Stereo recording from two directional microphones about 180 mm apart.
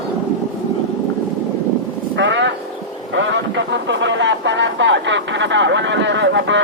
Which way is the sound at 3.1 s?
85° right.